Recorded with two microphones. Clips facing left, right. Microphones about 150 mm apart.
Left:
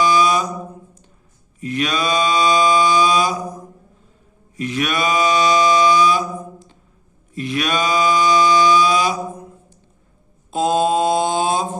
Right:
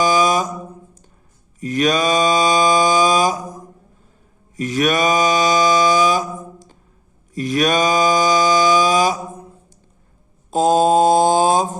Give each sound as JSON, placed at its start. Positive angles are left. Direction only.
{"t": 0.0, "sound": "mantra", "side_deg": -40}
{"t": 1.6, "sound": "mantra", "side_deg": -40}